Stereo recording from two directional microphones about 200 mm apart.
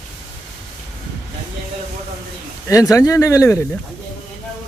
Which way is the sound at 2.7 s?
15° left (ahead or behind).